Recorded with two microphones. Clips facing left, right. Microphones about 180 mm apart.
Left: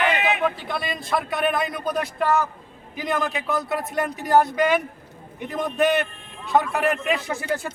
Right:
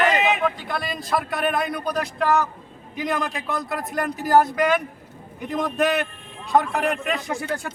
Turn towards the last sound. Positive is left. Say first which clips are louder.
# left 1 dB
turn(degrees=0)  # may be behind; listen again after turning